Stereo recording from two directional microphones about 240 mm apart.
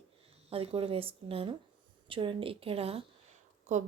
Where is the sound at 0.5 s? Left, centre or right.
Right.